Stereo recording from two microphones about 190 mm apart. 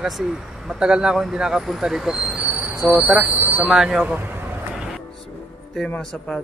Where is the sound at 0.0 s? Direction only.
Centre (ahead or behind).